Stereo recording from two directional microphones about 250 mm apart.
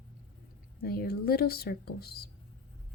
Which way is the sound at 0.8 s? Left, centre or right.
Left.